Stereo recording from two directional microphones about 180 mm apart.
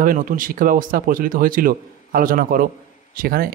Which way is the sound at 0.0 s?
50° right (ahead or behind).